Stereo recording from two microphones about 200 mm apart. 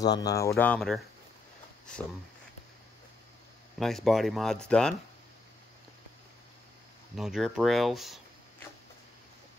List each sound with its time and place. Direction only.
0.0 s speech: 20° left (ahead or behind); by 1.0 s centre (ahead or behind)
3.8 s speech: centre (ahead or behind)
7.2 s speech: centre (ahead or behind)